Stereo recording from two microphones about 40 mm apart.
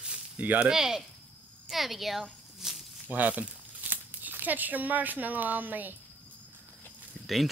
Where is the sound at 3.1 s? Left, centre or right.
Right.